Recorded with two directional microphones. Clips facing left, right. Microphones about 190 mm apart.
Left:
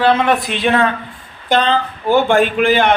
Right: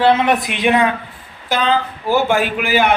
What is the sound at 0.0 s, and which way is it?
A man's voice, 20° right (ahead or behind).